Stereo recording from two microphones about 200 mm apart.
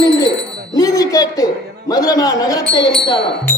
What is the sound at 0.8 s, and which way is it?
Speech, 15° left (ahead or behind).